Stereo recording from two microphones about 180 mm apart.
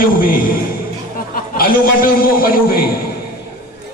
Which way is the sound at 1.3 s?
55° left (ahead or behind).